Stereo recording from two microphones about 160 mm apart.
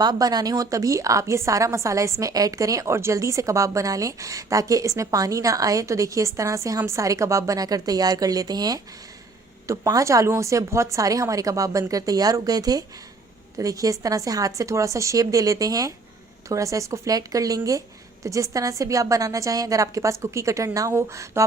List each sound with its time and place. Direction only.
0.0 s a woman's voice: 25° right (ahead or behind)